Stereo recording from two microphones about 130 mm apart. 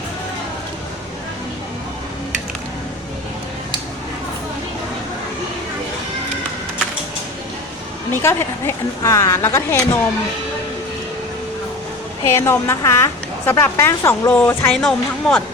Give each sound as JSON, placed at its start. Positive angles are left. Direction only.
{"t": 8.1, "sound": "a woman's voice", "side_deg": 20}
{"t": 12.2, "sound": "a woman's voice", "side_deg": 20}